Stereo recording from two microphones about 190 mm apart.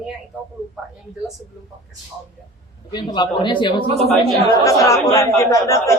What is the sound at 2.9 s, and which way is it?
A man's voice, 25° left (ahead or behind).